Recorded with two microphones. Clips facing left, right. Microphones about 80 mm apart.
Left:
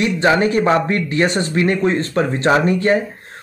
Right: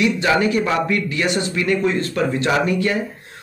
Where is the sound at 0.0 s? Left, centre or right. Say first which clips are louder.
Left 2 dB; left.